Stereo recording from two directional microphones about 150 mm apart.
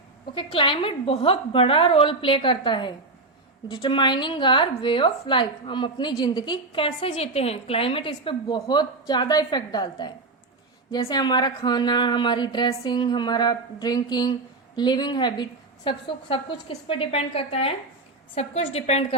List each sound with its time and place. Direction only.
0.3 s a woman's voice: 35° left (ahead or behind)